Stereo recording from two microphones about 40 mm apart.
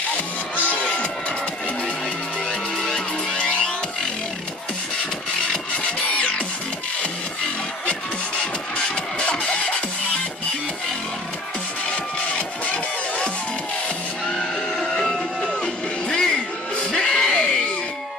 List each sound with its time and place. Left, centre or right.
0.6 s music: left
3.3 s music: centre
6.1 s music: left
8.7 s music: left
14.8 s a sound: centre
16.1 s music: centre